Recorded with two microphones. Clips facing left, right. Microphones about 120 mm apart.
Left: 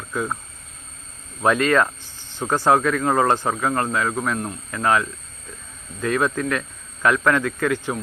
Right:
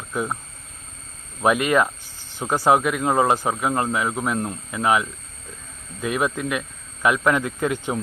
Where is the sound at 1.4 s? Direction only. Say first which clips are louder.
Left 1 dB; 15° right (ahead or behind).